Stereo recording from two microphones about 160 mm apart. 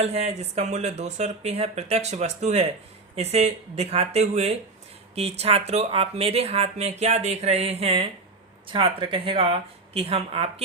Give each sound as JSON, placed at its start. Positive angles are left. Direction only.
{"t": 0.0, "sound": "speech", "side_deg": -40}